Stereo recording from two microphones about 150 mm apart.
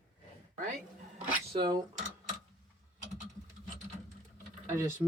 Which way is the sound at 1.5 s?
30° right (ahead or behind).